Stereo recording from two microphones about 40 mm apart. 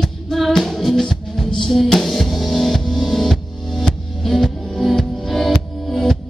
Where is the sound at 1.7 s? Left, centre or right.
Centre.